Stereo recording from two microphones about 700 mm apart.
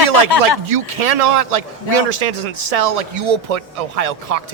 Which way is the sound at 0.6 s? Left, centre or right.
Right.